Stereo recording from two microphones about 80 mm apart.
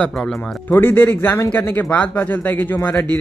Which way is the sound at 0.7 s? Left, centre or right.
Left.